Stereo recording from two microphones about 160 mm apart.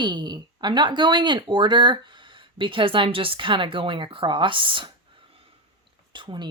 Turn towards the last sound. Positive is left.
turn(degrees=-30)  # may be behind; listen again after turning